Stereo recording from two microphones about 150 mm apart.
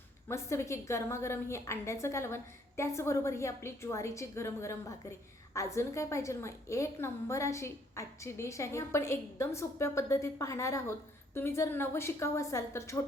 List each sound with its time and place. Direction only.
0.3 s a woman's voice: 20° left (ahead or behind)